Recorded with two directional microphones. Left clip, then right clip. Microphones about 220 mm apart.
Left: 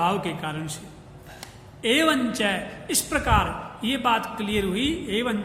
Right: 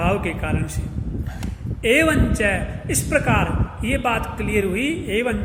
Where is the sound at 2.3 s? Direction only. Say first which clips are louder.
Right 4 dB; 25° left (ahead or behind).